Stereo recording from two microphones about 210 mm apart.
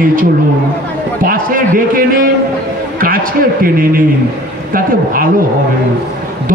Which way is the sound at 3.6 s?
45° right (ahead or behind).